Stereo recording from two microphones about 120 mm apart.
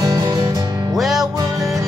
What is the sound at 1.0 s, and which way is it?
Music, centre (ahead or behind).